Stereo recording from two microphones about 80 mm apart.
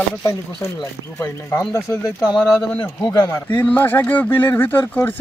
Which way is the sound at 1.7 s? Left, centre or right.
Left.